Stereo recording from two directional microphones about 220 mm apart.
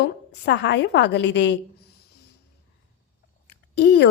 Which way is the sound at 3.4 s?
50° left (ahead or behind).